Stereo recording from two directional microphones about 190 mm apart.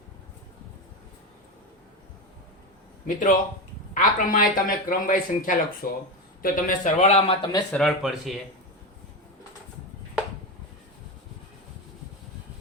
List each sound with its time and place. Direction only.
3.1 s a man's voice: 45° left (ahead or behind); by 7.6 s 30° left (ahead or behind)
7.7 s speech: centre (ahead or behind)